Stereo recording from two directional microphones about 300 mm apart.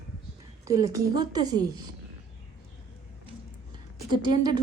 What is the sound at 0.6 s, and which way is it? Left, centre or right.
A woman's voice, centre.